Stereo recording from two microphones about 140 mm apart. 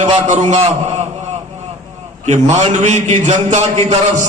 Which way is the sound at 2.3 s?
55° right (ahead or behind).